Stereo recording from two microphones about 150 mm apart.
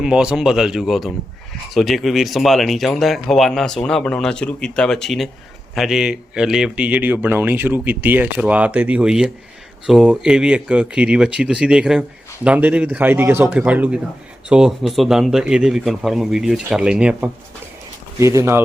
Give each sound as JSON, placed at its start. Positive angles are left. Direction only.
{"t": 0.0, "sound": "a man's voice", "side_deg": -5}
{"t": 18.2, "sound": "speech", "side_deg": -20}